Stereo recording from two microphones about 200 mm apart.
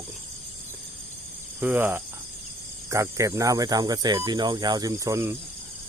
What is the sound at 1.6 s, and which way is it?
Speech, 10° right (ahead or behind).